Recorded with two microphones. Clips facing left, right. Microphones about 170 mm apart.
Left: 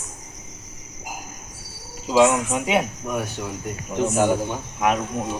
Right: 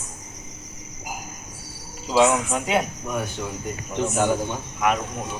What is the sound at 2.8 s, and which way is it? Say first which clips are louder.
A man's voice: left 1 dB; 5° left (ahead or behind).